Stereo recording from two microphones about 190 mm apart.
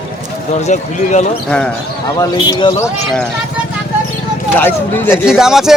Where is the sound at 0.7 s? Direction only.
35° left (ahead or behind).